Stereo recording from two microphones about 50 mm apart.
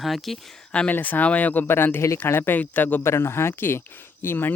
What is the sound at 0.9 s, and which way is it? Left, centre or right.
Speech, left.